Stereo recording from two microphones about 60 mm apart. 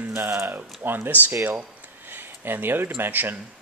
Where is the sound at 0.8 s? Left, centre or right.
Right.